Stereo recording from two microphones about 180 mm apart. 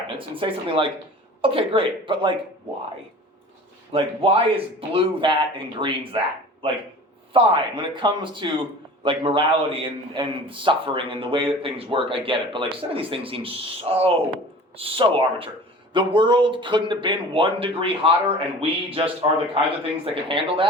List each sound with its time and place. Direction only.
0.3 s a man's voice: 30° right (ahead or behind)
3.9 s a man's voice: 30° right (ahead or behind)